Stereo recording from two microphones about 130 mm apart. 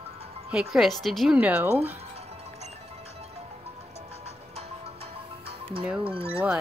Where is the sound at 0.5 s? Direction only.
5° right (ahead or behind).